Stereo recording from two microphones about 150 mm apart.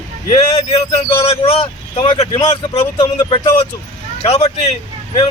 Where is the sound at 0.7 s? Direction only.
45° left (ahead or behind).